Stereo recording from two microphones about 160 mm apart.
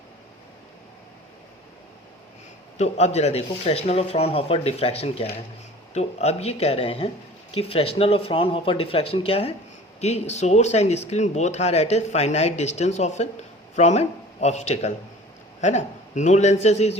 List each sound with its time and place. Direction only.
2.7 s speech: 45° left (ahead or behind)